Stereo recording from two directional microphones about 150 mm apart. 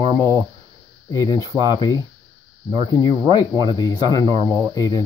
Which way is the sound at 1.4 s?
30° right (ahead or behind).